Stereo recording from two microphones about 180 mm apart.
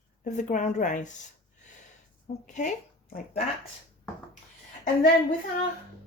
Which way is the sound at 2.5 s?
45° left (ahead or behind).